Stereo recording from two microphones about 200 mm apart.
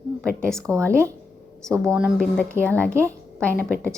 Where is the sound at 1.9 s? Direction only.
5° right (ahead or behind).